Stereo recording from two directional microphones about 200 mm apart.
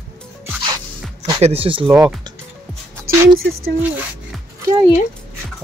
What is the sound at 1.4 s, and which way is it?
Speech, 30° right (ahead or behind).